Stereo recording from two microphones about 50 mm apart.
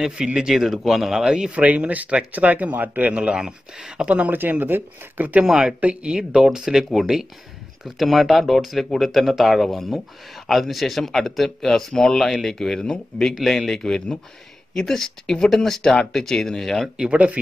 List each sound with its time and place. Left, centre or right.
0.0 s speech: centre
1.5 s speech: right; by 4.1 s centre
4.3 s speech: right
5.4 s speech: centre
11.9 s speech: centre
12.2 s speech: centre
12.5 s speech: centre
16.9 s speech: centre